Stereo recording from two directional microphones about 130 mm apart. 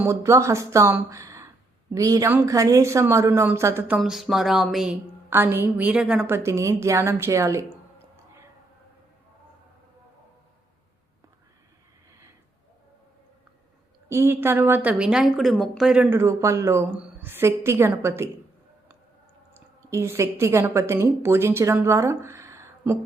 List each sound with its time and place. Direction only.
0.0 s a woman's voice: 20° right (ahead or behind)
1.1 s a sound: 25° right (ahead or behind)
1.9 s a woman's voice: 25° right (ahead or behind); by 4.9 s centre (ahead or behind)
5.3 s a woman's voice: 15° right (ahead or behind)
14.1 s a woman's voice: 20° right (ahead or behind)
16.9 s a woman's voice: 10° right (ahead or behind)
19.5 s a woman's voice: 20° right (ahead or behind)